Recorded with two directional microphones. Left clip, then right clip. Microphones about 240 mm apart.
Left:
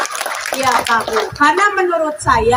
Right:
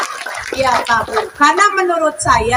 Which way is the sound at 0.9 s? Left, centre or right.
Right.